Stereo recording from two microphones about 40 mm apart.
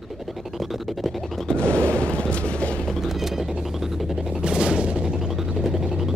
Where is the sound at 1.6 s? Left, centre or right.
Right.